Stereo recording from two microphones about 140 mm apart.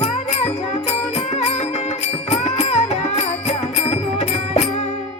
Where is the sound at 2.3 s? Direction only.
50° left (ahead or behind).